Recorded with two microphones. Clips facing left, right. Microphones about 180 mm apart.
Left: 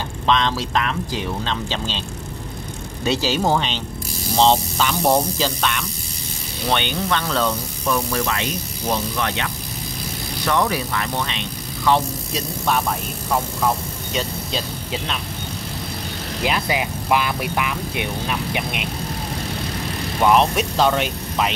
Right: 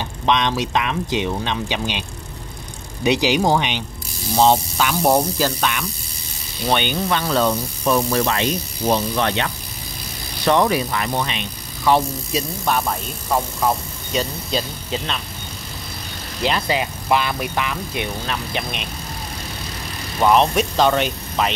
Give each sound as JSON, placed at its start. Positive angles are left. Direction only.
{"t": 0.3, "sound": "speech", "side_deg": -15}
{"t": 7.8, "sound": "speech", "side_deg": -30}
{"t": 14.1, "sound": "speech", "side_deg": 0}
{"t": 16.4, "sound": "speech", "side_deg": 10}
{"t": 20.2, "sound": "speech", "side_deg": 0}